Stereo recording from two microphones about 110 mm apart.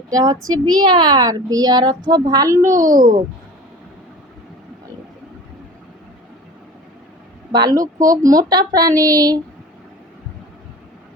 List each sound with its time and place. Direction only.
0.1 s a woman's voice: 35° right (ahead or behind)
7.5 s a woman's voice: 35° right (ahead or behind)